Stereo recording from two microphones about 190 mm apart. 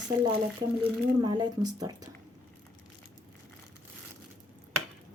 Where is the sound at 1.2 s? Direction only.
20° right (ahead or behind).